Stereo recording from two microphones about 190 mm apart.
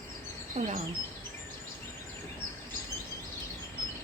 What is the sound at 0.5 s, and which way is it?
Speech, 35° right (ahead or behind).